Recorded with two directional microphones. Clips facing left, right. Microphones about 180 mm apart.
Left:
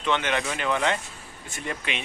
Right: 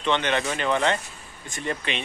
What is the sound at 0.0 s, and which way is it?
Speech, 5° left (ahead or behind).